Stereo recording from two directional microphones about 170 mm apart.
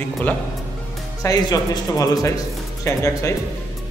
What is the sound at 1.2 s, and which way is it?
A man's voice, 20° left (ahead or behind).